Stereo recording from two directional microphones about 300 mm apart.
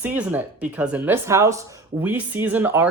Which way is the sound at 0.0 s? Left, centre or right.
Centre.